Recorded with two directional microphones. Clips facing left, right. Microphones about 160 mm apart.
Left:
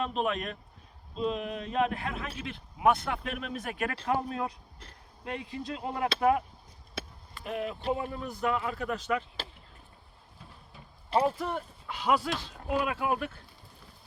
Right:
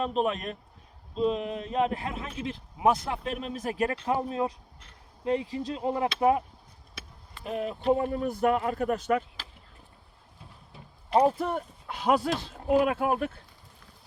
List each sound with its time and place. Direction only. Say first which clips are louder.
0.0 s a man's voice: right 3 dB; 35° right (ahead or behind)
7.4 s a man's voice: right 5 dB; 35° right (ahead or behind)
11.2 s a man's voice: right 5 dB; 40° right (ahead or behind)
12.3 s a man's voice: right 7 dB; 30° right (ahead or behind)